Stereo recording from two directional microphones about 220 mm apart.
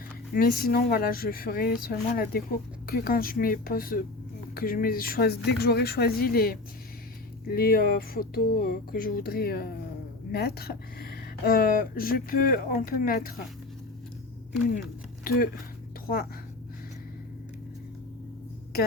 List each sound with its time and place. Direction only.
0.3 s speech: 45° left (ahead or behind)
15.2 s speech: 40° left (ahead or behind)